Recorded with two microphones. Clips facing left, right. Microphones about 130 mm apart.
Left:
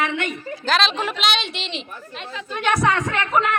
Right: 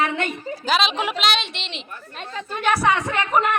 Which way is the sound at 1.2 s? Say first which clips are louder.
Even; centre (ahead or behind).